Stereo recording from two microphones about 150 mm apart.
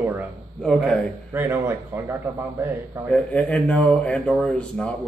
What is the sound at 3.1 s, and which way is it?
A man's voice, 10° left (ahead or behind).